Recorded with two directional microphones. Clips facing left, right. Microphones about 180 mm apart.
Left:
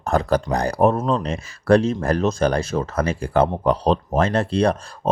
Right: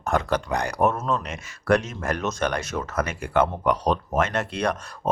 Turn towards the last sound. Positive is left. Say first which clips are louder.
# left 6 dB
turn(degrees=30)  # may be behind; listen again after turning